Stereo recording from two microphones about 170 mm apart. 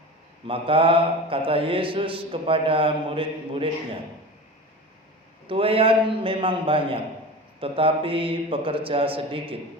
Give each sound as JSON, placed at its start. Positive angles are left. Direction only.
{"t": 0.4, "sound": "mantra", "side_deg": -30}
{"t": 5.5, "sound": "mantra", "side_deg": -30}